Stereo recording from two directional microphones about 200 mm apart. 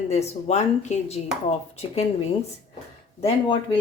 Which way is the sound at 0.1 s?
35° left (ahead or behind).